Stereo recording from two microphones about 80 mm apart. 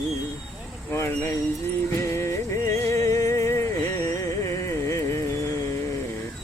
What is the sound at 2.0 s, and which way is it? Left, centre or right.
Music, left.